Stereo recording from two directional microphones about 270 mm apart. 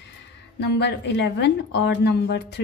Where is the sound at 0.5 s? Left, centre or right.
Left.